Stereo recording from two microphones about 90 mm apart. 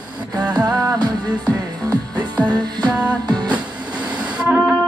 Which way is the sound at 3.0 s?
55° right (ahead or behind).